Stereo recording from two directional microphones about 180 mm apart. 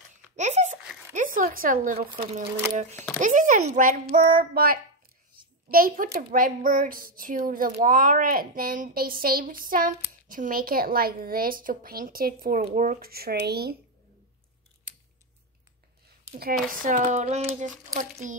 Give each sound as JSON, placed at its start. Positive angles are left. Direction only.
{"t": 0.1, "sound": "a sound", "side_deg": -40}
{"t": 1.1, "sound": "speech", "side_deg": -50}
{"t": 2.8, "sound": "a child's voice", "side_deg": -40}
{"t": 4.1, "sound": "child singing", "side_deg": -55}
{"t": 5.7, "sound": "speech", "side_deg": -50}
{"t": 16.6, "sound": "speech", "side_deg": -50}